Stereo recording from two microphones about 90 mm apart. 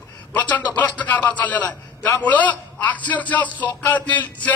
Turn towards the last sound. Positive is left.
turn(degrees=15)  # may be behind; listen again after turning